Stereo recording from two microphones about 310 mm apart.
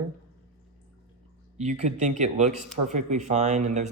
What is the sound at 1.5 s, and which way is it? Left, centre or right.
Speech, right.